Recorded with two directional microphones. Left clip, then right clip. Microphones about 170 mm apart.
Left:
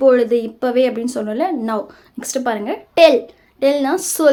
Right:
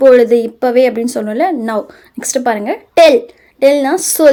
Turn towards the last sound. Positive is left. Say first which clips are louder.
# right 5 dB
turn(degrees=-30)  # may be behind; listen again after turning